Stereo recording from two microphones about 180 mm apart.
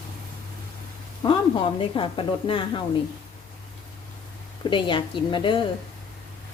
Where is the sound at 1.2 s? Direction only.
30° left (ahead or behind).